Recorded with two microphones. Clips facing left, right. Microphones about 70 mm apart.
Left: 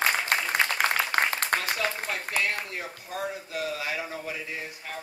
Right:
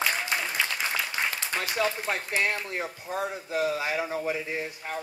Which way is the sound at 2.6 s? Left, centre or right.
Right.